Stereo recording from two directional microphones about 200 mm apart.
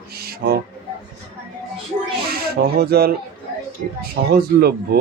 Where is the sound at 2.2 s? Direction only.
50° right (ahead or behind).